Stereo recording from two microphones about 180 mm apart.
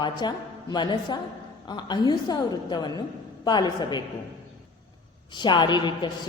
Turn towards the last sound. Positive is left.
turn(degrees=25)  # may be behind; listen again after turning